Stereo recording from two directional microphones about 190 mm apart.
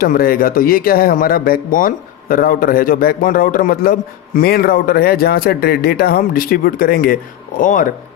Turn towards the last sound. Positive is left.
turn(degrees=45)  # may be behind; listen again after turning